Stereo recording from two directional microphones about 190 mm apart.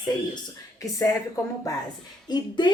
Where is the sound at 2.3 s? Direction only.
25° left (ahead or behind).